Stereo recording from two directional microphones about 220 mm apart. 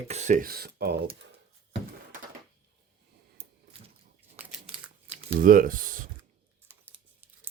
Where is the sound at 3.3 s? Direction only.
25° right (ahead or behind).